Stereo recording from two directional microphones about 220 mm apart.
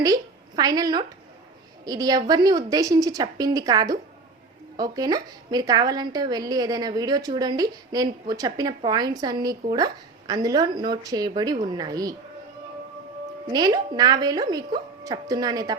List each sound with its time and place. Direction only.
0.0 s a woman's voice: 15° right (ahead or behind)
13.5 s a woman's voice: 20° right (ahead or behind)